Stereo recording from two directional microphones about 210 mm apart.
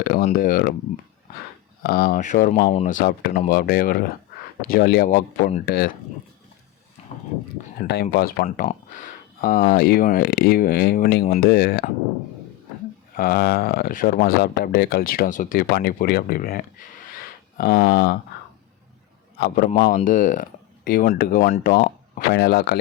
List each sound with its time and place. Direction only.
0.0 s speech: 45° left (ahead or behind)
1.8 s speech: 45° left (ahead or behind)
7.8 s speech: 50° left (ahead or behind)
13.1 s speech: 45° left (ahead or behind)
19.4 s speech: 50° left (ahead or behind)
20.0 s speech: 40° left (ahead or behind)